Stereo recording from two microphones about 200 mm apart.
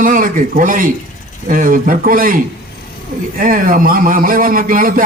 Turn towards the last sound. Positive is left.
turn(degrees=-45)  # may be behind; listen again after turning